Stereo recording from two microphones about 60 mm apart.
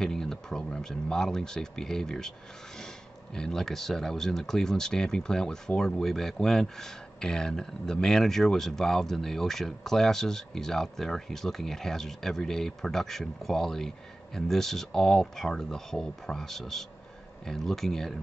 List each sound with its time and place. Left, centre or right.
0.0 s speech: centre
3.3 s speech: centre